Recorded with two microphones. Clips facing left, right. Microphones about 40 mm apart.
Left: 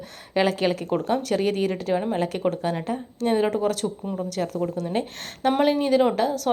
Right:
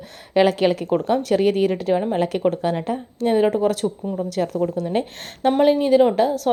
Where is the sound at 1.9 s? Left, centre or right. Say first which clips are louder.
Right 4 dB; centre.